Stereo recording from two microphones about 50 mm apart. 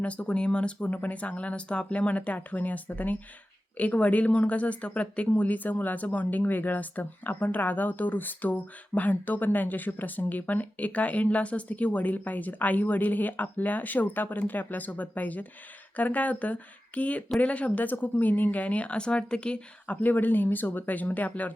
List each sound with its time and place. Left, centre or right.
0.0 s speech: left
0.9 s speech: left; by 20.0 s centre
20.0 s speech: left